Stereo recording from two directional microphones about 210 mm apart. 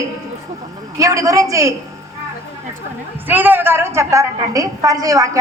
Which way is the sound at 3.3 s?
10° right (ahead or behind).